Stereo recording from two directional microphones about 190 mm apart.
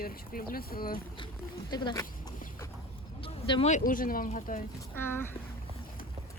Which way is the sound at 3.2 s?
30° left (ahead or behind).